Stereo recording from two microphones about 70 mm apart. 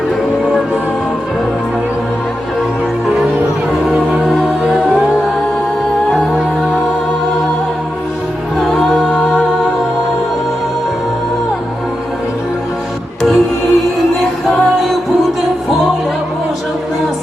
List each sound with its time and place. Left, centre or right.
4.1 s music: centre
4.4 s music: centre
8.5 s music: centre
13.2 s music: centre